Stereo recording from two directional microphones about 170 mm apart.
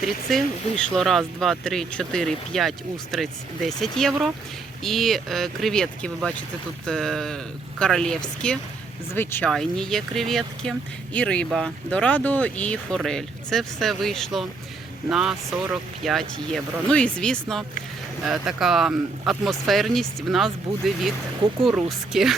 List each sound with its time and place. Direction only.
0.0 s speech: centre (ahead or behind)
9.5 s speech: 5° left (ahead or behind)